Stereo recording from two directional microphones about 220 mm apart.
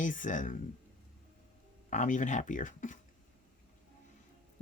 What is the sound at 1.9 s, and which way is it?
Speech, 35° left (ahead or behind).